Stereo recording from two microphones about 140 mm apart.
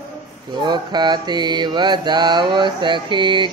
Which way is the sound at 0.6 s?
30° right (ahead or behind).